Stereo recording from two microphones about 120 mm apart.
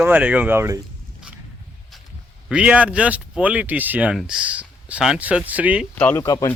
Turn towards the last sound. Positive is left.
turn(degrees=25)  # may be behind; listen again after turning